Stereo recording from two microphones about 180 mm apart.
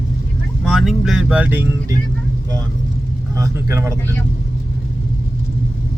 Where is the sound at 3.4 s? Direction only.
15° right (ahead or behind).